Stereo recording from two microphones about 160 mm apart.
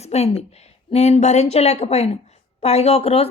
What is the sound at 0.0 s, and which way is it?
A woman's voice, 40° left (ahead or behind).